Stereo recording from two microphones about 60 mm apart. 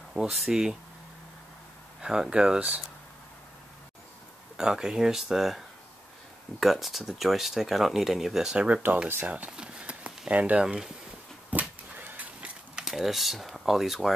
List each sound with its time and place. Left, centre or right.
0.1 s speech: centre
2.0 s speech: centre
4.6 s speech: centre
6.6 s speech: centre
8.8 s speech: right
9.5 s a sound: centre
10.6 s speech: centre
11.5 s a sound: right
12.7 s speech: centre